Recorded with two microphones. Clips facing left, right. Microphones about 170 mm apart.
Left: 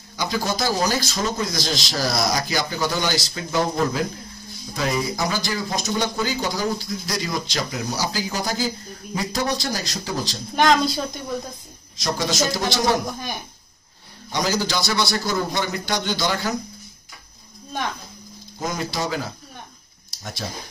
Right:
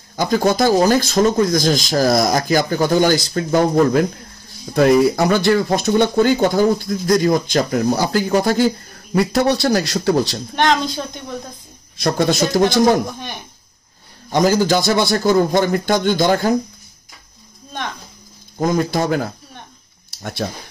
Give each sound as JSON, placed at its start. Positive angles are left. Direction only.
{"t": 0.1, "sound": "speech", "side_deg": -50}
{"t": 10.5, "sound": "a woman's voice", "side_deg": 5}
{"t": 12.0, "sound": "speech", "side_deg": -60}
{"t": 14.3, "sound": "speech", "side_deg": -50}
{"t": 18.6, "sound": "speech", "side_deg": -50}